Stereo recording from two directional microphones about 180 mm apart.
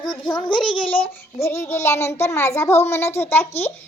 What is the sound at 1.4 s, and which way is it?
A child's voice, 15° left (ahead or behind).